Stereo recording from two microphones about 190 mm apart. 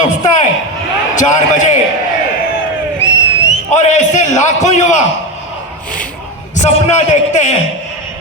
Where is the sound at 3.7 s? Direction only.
40° left (ahead or behind).